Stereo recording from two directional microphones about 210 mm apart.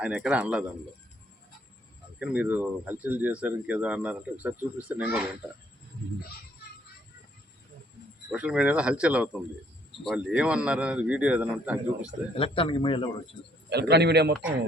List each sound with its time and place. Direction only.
0.0 s a man's voice: 5° right (ahead or behind)
2.1 s speech: 5° right (ahead or behind)
8.3 s a man's voice: 5° right (ahead or behind)
12.4 s a man's voice: 25° left (ahead or behind)
13.7 s a man's voice: 50° right (ahead or behind)